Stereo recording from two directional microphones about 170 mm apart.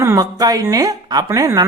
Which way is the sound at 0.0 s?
20° right (ahead or behind).